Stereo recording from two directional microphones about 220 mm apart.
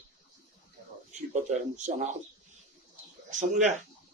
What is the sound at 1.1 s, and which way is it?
Speech, 35° right (ahead or behind).